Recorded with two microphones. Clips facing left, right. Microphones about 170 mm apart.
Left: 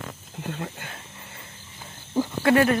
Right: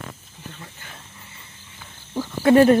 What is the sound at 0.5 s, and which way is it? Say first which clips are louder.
Speech: left 9 dB; 60° left (ahead or behind).